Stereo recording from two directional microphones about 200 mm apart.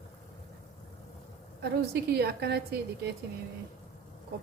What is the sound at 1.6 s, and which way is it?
A woman's voice, 55° right (ahead or behind).